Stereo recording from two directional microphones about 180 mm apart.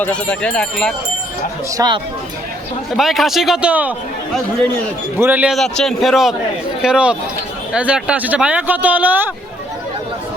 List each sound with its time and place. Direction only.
0.0 s a man's voice: 5° left (ahead or behind)
1.7 s speech: 20° right (ahead or behind)
2.9 s a man's voice: centre (ahead or behind)
5.2 s a man's voice: 10° right (ahead or behind)